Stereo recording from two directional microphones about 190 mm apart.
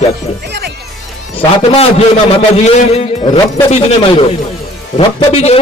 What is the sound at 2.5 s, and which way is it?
A man's voice, 35° left (ahead or behind).